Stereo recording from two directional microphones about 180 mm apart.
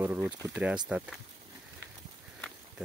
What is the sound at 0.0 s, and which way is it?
Speech, 10° right (ahead or behind).